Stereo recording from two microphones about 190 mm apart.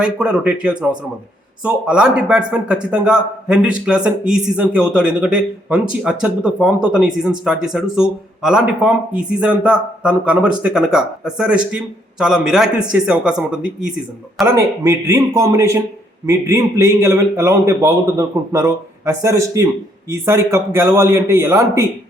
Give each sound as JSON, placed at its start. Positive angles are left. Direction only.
{"t": 0.0, "sound": "a man's voice", "side_deg": -5}
{"t": 14.5, "sound": "a man's voice", "side_deg": -15}